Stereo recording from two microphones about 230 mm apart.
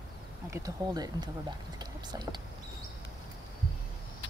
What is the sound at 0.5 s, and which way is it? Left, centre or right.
Speech, centre.